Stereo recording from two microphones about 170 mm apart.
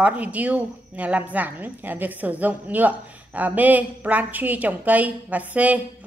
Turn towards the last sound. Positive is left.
turn(degrees=-10)  # may be behind; listen again after turning